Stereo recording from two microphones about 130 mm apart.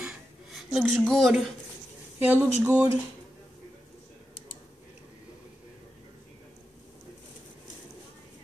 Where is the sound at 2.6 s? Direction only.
25° right (ahead or behind).